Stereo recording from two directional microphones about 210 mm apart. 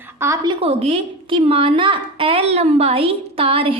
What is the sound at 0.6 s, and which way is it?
A woman's voice, 30° right (ahead or behind).